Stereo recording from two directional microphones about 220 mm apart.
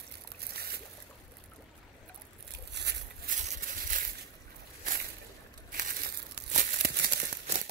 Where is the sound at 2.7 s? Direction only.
50° right (ahead or behind).